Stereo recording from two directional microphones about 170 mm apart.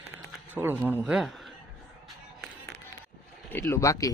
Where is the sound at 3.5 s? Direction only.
15° left (ahead or behind).